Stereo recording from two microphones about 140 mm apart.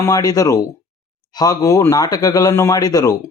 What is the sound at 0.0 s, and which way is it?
Speech, 25° left (ahead or behind).